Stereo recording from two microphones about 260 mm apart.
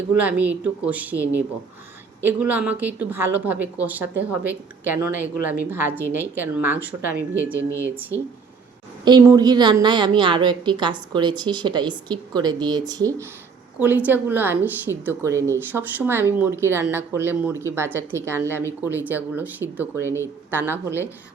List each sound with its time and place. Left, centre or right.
0.2 s a woman's voice: centre
9.0 s a woman's voice: centre